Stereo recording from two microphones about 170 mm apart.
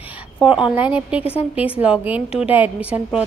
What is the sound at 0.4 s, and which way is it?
A woman's voice, 5° right (ahead or behind).